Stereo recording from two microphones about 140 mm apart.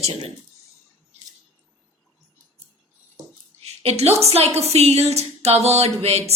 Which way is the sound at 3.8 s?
50° right (ahead or behind).